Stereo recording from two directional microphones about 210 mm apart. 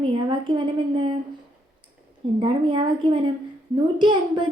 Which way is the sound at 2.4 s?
25° right (ahead or behind).